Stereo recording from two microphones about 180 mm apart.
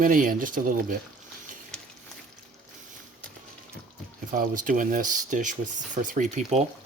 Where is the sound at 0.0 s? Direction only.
50° right (ahead or behind).